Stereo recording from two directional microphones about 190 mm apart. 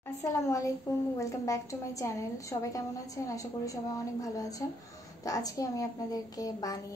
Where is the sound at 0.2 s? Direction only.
15° left (ahead or behind).